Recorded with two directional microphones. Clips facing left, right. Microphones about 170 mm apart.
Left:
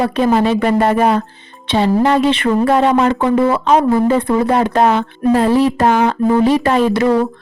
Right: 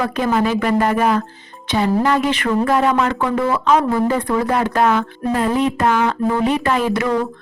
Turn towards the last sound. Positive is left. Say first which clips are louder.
# left 5 dB
turn(degrees=35)  # may be behind; listen again after turning